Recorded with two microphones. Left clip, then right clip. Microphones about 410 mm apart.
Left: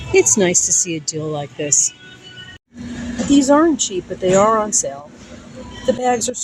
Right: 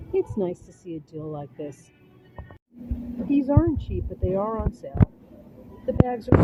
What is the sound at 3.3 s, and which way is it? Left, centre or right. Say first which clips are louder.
Speech: left 11 dB; right.